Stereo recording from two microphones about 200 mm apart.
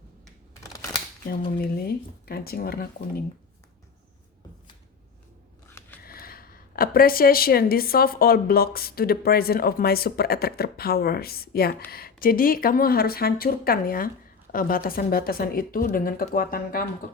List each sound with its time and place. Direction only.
1.5 s a woman's voice: 50° left (ahead or behind)
5.6 s scissors: 15° left (ahead or behind)
6.0 s a woman's voice: 50° left (ahead or behind)